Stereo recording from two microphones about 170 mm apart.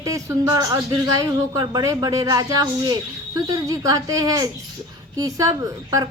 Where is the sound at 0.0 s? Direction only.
20° right (ahead or behind).